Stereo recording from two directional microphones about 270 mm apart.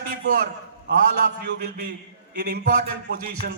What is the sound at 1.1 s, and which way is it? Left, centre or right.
Speech, right.